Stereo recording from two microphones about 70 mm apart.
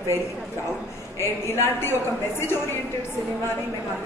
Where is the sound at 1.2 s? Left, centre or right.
Left.